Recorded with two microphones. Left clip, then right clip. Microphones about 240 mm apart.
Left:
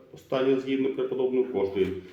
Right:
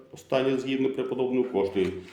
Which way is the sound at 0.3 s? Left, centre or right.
Right.